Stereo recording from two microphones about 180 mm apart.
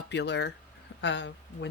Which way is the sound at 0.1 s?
75° left (ahead or behind).